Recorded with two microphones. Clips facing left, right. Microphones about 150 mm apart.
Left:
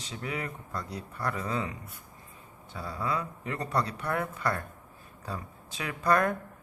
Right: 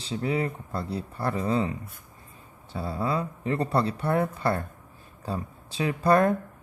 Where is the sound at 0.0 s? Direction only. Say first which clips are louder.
Right 8 dB; 30° right (ahead or behind).